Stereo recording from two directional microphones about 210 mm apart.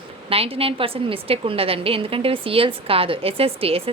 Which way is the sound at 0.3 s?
25° right (ahead or behind).